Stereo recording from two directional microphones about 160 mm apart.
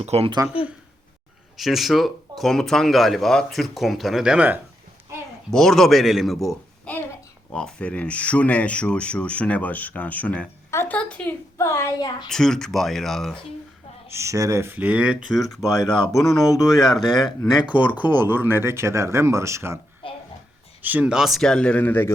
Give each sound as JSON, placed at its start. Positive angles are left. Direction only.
{"t": 0.0, "sound": "speech", "side_deg": -40}
{"t": 1.5, "sound": "speech", "side_deg": 0}
{"t": 5.5, "sound": "a man's voice", "side_deg": 0}
{"t": 12.3, "sound": "speech", "side_deg": 5}
{"t": 14.1, "sound": "speech", "side_deg": -15}
{"t": 16.4, "sound": "speech", "side_deg": 20}
{"t": 16.8, "sound": "speech", "side_deg": 0}
{"t": 17.4, "sound": "speech", "side_deg": 25}
{"t": 18.1, "sound": "speech", "side_deg": -15}
{"t": 20.8, "sound": "speech", "side_deg": -10}